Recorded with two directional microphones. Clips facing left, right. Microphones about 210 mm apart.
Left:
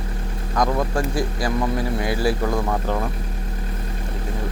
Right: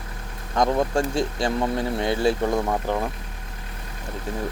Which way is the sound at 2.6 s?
10° right (ahead or behind).